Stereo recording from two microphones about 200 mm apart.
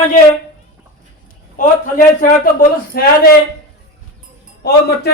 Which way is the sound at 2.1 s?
45° left (ahead or behind).